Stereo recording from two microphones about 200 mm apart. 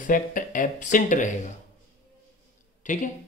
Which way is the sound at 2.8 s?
40° left (ahead or behind).